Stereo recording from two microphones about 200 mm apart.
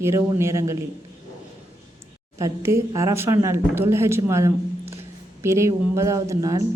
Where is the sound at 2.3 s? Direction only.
15° right (ahead or behind).